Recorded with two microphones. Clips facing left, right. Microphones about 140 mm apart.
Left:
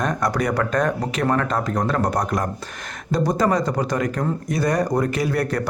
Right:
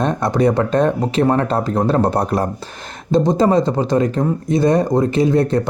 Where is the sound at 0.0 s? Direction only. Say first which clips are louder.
Right 6 dB; 25° right (ahead or behind).